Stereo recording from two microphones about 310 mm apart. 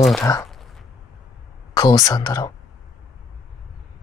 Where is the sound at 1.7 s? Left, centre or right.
Centre.